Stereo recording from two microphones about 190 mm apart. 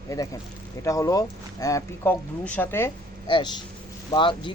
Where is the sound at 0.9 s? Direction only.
15° left (ahead or behind).